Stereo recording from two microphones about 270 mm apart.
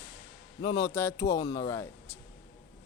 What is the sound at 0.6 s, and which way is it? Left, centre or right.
A man's voice, centre.